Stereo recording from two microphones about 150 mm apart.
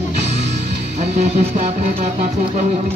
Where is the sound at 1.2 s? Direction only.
50° right (ahead or behind).